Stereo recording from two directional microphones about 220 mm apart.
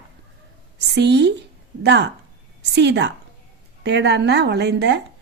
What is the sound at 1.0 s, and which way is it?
Speech, 50° right (ahead or behind).